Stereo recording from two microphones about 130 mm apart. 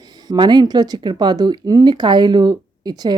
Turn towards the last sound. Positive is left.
turn(degrees=-30)  # may be behind; listen again after turning